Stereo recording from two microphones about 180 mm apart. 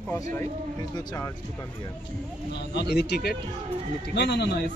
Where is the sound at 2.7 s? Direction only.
65° left (ahead or behind).